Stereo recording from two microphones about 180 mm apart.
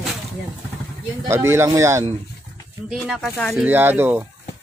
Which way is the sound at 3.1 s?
5° left (ahead or behind).